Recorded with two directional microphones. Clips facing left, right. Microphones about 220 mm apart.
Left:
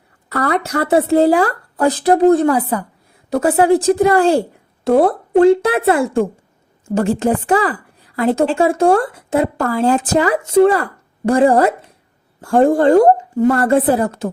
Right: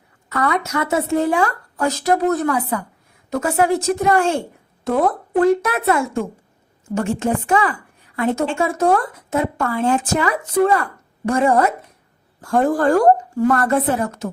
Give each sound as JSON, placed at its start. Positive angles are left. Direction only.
{"t": 0.3, "sound": "a woman's voice", "side_deg": 35}